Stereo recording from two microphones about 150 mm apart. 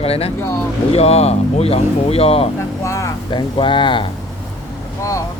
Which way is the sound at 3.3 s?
35° left (ahead or behind).